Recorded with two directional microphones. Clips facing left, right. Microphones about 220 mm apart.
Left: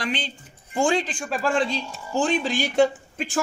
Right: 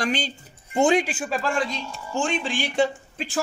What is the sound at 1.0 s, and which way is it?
Speech, 5° right (ahead or behind).